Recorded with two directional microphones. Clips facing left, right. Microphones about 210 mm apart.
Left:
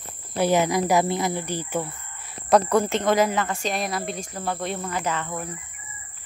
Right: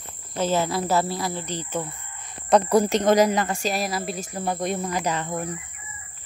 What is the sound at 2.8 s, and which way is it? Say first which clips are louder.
Speech: right 3 dB; 40° right (ahead or behind).